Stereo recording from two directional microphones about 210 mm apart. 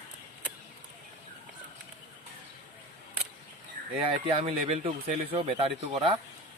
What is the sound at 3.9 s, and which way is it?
Speech, 25° right (ahead or behind).